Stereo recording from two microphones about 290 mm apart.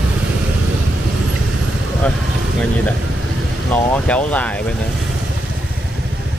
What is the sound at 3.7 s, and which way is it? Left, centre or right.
Speech, centre.